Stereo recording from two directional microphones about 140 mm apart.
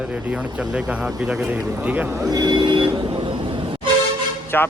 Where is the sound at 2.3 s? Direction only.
30° right (ahead or behind).